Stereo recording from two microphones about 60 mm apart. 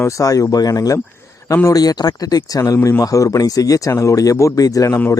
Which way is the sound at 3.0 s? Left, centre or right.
Left.